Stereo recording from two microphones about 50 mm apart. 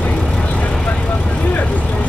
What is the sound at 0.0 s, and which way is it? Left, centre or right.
Vehicle, left.